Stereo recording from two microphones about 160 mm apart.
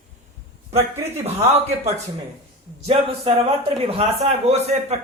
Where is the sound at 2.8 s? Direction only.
35° right (ahead or behind).